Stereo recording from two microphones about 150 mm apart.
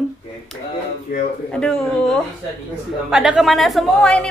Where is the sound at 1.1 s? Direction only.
90° left.